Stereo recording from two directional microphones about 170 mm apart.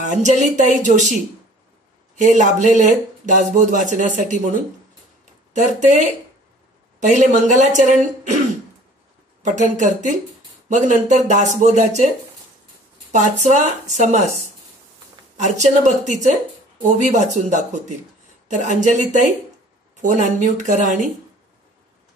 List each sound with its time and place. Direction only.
0.0 s a woman's voice: 45° right (ahead or behind)
2.1 s a woman's voice: 45° right (ahead or behind)
5.2 s a sound: 45° right (ahead or behind)
7.0 s a woman's voice: 45° right (ahead or behind)
9.4 s a woman's voice: 45° right (ahead or behind)
13.1 s a woman's voice: 45° right (ahead or behind)
15.3 s a woman's voice: 45° right (ahead or behind)
20.0 s a woman's voice: 45° right (ahead or behind)